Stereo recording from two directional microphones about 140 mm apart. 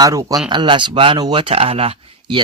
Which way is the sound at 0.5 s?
35° right (ahead or behind).